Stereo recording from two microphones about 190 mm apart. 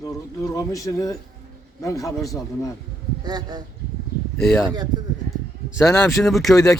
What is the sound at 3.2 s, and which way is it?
Speech, 20° right (ahead or behind).